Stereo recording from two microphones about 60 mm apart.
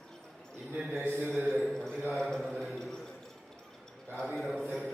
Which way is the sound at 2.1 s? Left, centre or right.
Centre.